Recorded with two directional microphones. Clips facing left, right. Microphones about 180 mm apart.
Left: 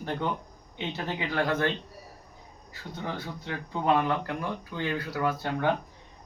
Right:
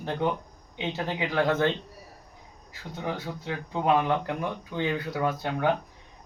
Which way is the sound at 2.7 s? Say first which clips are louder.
Right 3 dB; 15° right (ahead or behind).